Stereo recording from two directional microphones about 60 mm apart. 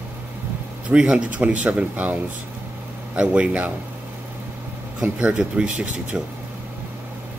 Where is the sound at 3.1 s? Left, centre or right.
Centre.